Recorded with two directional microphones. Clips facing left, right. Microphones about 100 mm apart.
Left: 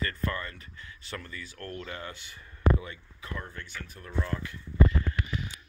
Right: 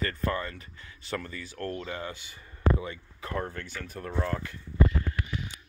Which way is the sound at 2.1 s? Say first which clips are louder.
Right 3 dB; 5° right (ahead or behind).